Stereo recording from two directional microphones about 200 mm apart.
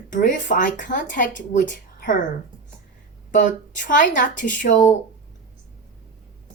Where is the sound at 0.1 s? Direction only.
40° left (ahead or behind).